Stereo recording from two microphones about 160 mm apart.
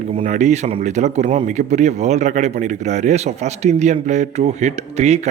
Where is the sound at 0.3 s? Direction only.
50° right (ahead or behind).